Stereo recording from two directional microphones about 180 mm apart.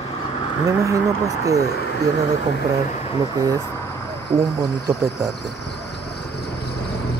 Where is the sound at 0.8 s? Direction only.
15° right (ahead or behind).